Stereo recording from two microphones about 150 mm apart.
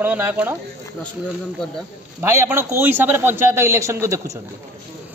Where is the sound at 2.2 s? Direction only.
15° right (ahead or behind).